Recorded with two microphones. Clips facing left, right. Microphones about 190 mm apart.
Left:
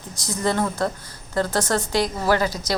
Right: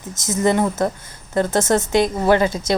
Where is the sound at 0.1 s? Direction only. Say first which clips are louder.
Right 6 dB; 20° right (ahead or behind).